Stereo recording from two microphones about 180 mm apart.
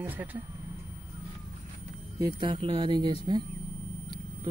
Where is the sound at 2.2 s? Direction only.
25° right (ahead or behind).